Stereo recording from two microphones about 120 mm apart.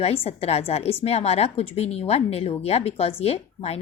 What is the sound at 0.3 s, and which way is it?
Speech, 60° left (ahead or behind).